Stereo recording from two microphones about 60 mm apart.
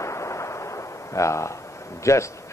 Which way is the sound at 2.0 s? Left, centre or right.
Left.